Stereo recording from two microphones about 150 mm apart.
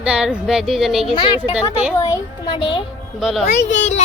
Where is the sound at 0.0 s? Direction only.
5° right (ahead or behind).